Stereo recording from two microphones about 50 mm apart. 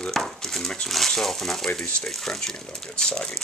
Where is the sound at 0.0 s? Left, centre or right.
Centre.